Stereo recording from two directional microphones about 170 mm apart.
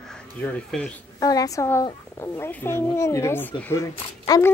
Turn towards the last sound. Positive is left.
turn(degrees=20)  # may be behind; listen again after turning